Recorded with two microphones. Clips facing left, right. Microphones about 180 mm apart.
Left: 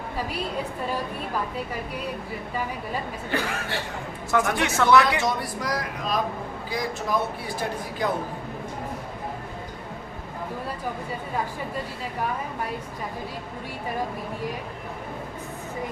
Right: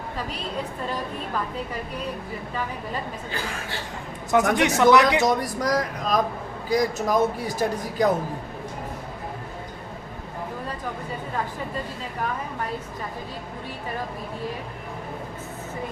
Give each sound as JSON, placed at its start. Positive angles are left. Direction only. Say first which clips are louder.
{"t": 4.3, "sound": "speech", "louder": "right 4 dB", "side_deg": -20}
{"t": 5.2, "sound": "a man's voice", "louder": "right 5 dB", "side_deg": -40}